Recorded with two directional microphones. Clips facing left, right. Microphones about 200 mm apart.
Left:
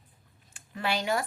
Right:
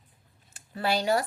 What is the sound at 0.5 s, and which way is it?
Speech, 40° right (ahead or behind).